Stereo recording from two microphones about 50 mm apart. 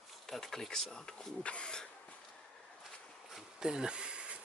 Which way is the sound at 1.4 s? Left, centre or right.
Left.